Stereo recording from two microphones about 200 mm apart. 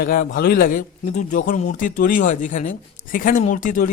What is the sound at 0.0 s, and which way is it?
A man's voice, 45° left (ahead or behind).